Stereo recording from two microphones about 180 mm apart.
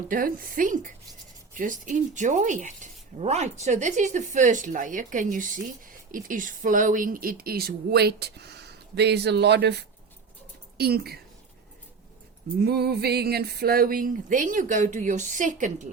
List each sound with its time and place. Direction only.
0.1 s speech: 50° right (ahead or behind)
12.6 s speech: 65° right (ahead or behind); by 15.7 s 45° right (ahead or behind)